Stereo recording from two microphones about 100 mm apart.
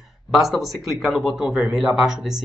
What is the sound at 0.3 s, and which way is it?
Speech, centre (ahead or behind).